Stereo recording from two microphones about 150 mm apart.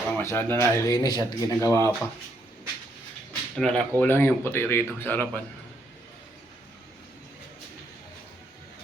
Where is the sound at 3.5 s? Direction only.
5° left (ahead or behind).